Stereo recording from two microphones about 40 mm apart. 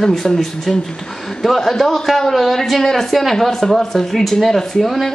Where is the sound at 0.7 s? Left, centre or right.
Centre.